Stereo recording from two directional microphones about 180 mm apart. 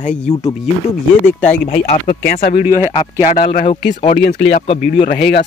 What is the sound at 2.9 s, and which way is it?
Speech, 30° left (ahead or behind).